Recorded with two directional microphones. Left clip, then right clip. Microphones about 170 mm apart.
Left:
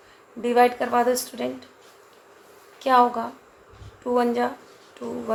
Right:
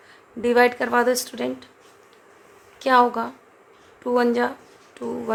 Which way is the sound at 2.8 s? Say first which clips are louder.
Right 1 dB; 35° right (ahead or behind).